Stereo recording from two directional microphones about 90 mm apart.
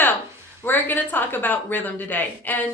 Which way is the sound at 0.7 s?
20° left (ahead or behind).